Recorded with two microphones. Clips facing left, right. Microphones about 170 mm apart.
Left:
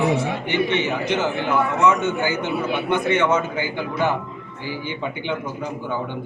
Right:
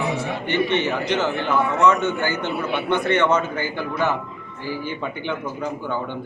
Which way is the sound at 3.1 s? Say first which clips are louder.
Even; 10° left (ahead or behind).